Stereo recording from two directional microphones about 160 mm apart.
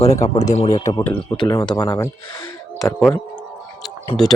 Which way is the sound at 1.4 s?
30° left (ahead or behind).